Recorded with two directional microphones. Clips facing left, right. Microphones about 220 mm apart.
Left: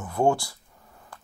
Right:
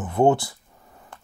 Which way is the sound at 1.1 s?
25° right (ahead or behind).